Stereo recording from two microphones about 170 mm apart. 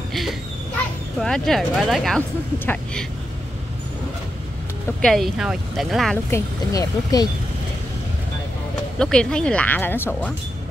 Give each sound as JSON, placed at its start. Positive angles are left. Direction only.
{"t": 0.1, "sound": "speech", "side_deg": 0}
{"t": 5.0, "sound": "speech", "side_deg": 0}
{"t": 6.3, "sound": "speech", "side_deg": 20}
{"t": 8.9, "sound": "speech", "side_deg": 5}